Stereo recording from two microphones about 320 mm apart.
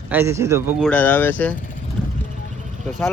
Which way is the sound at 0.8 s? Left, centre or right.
Centre.